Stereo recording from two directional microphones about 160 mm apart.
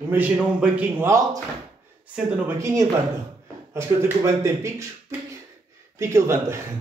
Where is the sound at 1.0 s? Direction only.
20° right (ahead or behind).